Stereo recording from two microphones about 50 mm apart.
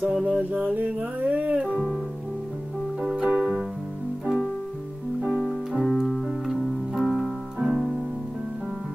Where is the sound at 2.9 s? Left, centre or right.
Centre.